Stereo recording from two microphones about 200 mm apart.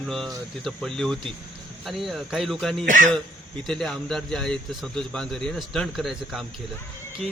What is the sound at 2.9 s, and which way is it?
Speech, 40° right (ahead or behind).